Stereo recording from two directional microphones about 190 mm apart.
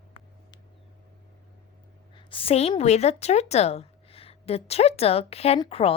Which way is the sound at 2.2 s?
30° left (ahead or behind).